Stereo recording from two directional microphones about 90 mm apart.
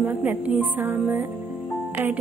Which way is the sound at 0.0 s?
20° right (ahead or behind).